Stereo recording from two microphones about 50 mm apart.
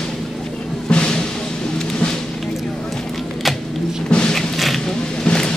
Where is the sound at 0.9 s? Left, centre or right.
Centre.